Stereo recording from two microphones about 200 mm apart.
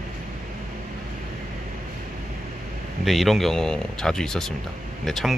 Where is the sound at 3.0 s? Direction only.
Centre (ahead or behind).